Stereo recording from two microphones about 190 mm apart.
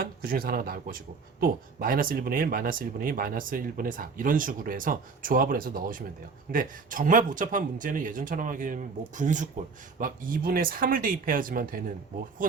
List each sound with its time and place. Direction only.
0.0 s speech: 50° right (ahead or behind)